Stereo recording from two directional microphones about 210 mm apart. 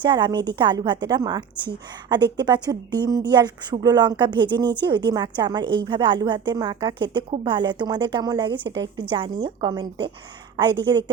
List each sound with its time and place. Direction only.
0.0 s a woman's voice: 20° right (ahead or behind)